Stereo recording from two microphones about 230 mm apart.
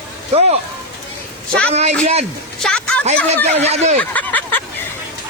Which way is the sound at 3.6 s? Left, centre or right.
Right.